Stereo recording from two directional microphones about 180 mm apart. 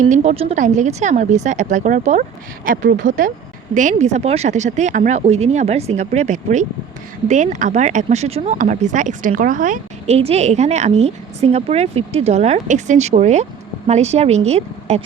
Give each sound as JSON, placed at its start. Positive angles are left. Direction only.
{"t": 0.0, "sound": "speech", "side_deg": -40}